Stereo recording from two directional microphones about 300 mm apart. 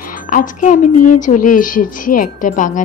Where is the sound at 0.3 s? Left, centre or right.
Left.